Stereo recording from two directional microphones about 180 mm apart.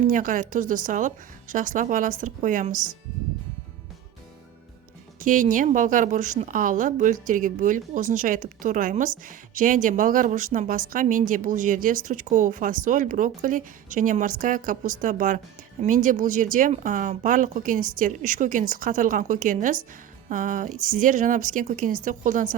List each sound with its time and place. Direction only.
0.0 s a woman's voice: 50° right (ahead or behind)
5.2 s a woman's voice: 45° right (ahead or behind)